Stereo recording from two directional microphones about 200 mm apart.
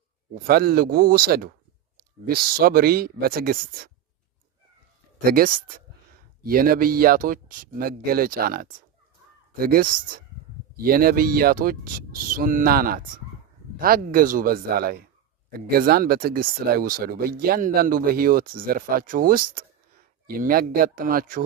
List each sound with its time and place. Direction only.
0.3 s speech: 50° right (ahead or behind)
5.2 s speech: 45° right (ahead or behind)